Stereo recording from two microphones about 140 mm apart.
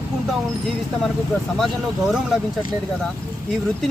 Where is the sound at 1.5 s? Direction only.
Centre (ahead or behind).